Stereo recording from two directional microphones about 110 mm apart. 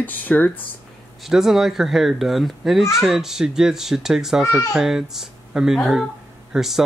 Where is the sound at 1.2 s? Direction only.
5° right (ahead or behind).